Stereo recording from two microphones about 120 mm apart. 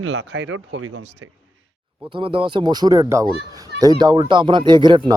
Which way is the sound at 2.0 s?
45° right (ahead or behind).